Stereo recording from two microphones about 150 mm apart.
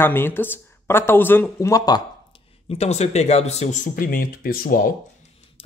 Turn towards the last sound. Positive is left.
turn(degrees=70)  # may be behind; listen again after turning